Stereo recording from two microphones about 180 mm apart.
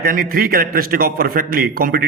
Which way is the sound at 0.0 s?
55° right (ahead or behind).